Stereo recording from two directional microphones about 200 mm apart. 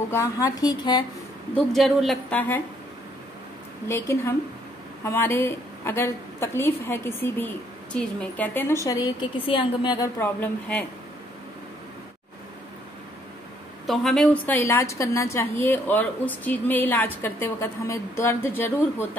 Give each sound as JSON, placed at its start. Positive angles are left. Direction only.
{"t": 0.1, "sound": "a woman's voice", "side_deg": 15}
{"t": 1.5, "sound": "a woman's voice", "side_deg": 0}
{"t": 3.8, "sound": "a woman's voice", "side_deg": 10}
{"t": 10.1, "sound": "a woman's voice", "side_deg": 10}
{"t": 13.8, "sound": "a woman's voice", "side_deg": 0}